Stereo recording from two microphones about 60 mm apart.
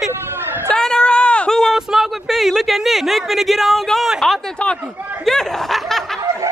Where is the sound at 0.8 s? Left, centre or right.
Centre.